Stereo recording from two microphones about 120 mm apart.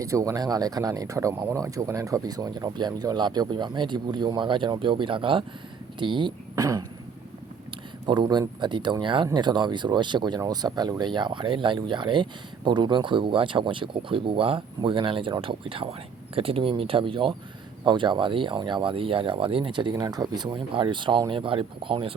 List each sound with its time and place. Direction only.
0.0 s speech: 25° right (ahead or behind)
6.6 s speech: 30° right (ahead or behind)
8.0 s speech: 40° right (ahead or behind)